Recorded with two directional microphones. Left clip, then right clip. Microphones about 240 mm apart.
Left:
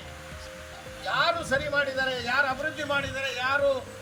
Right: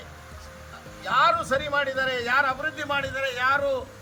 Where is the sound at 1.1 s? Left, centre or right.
Centre.